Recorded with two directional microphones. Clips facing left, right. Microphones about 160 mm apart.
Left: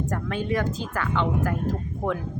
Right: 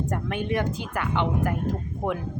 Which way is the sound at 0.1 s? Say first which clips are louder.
Even; 20° right (ahead or behind).